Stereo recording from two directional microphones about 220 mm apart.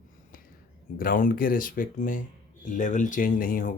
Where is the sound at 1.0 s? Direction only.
40° left (ahead or behind).